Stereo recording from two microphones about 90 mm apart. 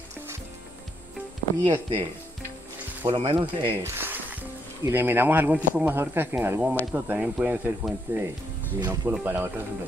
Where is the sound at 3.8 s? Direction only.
25° right (ahead or behind).